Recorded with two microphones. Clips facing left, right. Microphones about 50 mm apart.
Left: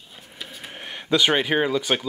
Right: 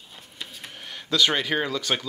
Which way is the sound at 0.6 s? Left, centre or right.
Left.